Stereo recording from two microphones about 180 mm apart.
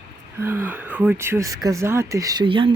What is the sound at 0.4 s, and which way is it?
Speech, 10° right (ahead or behind).